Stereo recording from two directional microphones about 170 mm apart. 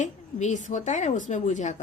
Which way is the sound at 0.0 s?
45° left (ahead or behind).